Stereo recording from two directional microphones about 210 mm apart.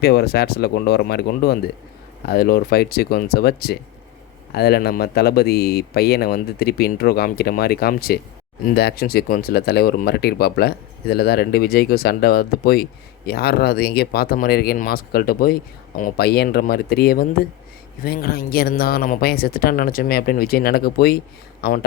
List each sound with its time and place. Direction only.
0.0 s speech: 50° left (ahead or behind)